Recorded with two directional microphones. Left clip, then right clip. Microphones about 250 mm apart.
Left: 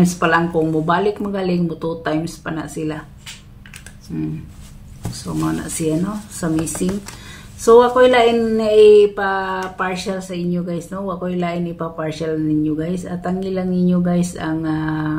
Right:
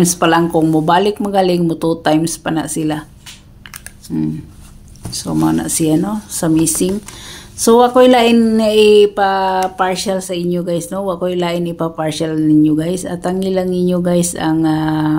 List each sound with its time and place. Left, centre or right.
0.0 s a woman's voice: right
4.1 s a woman's voice: right